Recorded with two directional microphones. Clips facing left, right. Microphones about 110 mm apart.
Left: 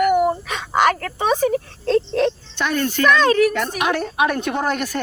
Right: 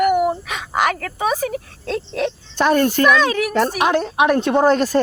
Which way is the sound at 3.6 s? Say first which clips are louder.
Right 4 dB; 30° right (ahead or behind).